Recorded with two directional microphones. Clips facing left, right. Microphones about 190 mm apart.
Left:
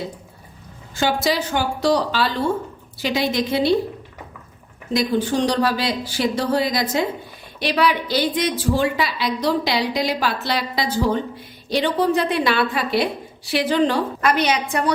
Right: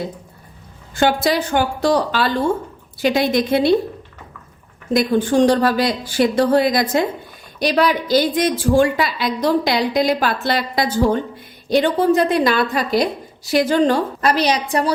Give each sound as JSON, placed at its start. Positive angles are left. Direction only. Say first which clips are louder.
{"t": 0.9, "sound": "a woman's voice", "louder": "right 4 dB", "side_deg": -55}
{"t": 4.9, "sound": "a woman's voice", "louder": "right 5 dB", "side_deg": -50}
{"t": 7.6, "sound": "a woman's voice", "louder": "right 3 dB", "side_deg": -45}